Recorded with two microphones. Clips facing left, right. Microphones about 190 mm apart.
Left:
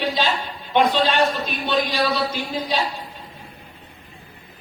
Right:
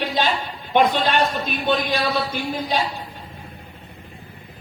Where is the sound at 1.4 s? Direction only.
50° right (ahead or behind).